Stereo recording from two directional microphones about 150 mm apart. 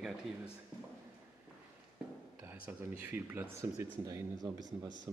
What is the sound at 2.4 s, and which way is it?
Speech, 15° right (ahead or behind).